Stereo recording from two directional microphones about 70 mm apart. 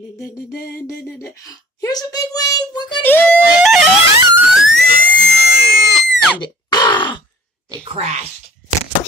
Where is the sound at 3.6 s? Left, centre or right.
Centre.